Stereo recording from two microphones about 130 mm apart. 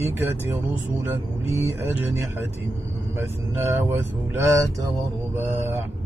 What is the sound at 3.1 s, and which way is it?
Speech, 20° right (ahead or behind).